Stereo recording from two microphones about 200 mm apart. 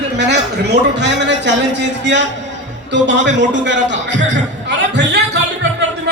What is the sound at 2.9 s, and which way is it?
A man's voice, 65° right (ahead or behind).